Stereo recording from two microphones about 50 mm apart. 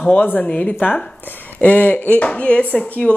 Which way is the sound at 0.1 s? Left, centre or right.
Left.